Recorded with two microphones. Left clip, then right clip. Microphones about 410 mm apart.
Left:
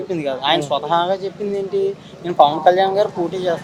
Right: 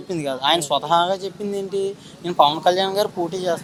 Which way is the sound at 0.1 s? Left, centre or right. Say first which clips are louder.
Left 1 dB; right.